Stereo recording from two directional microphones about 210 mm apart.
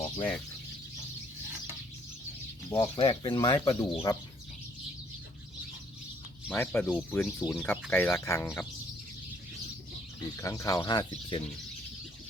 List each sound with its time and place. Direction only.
0.2 s speech: 10° left (ahead or behind)
2.6 s speech: 15° left (ahead or behind)
6.5 s speech: 10° left (ahead or behind)
10.4 s speech: 15° left (ahead or behind)